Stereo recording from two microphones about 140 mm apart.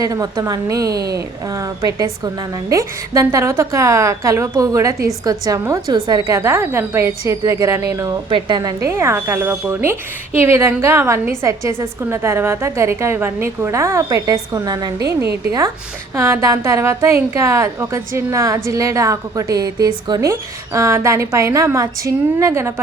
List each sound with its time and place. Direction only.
0.0 s a woman's voice: 25° right (ahead or behind)